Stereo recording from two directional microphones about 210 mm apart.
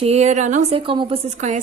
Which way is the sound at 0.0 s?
30° right (ahead or behind).